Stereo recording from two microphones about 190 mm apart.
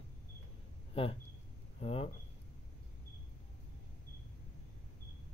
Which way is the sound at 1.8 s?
30° left (ahead or behind).